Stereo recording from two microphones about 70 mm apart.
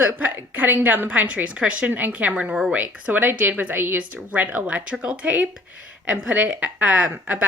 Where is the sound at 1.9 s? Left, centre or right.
Right.